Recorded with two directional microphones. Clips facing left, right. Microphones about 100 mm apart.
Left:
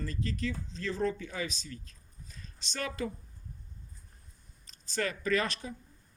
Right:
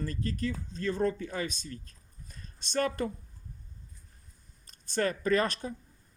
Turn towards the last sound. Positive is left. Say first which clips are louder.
# right 3 dB
turn(degrees=-40)  # may be behind; listen again after turning